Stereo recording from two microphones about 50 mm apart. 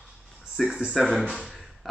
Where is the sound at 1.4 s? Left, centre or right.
Centre.